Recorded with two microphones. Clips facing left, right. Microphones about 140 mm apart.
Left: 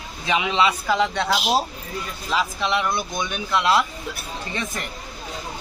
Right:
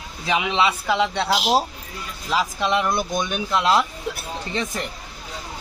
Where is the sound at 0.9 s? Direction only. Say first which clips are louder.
Even; 25° right (ahead or behind).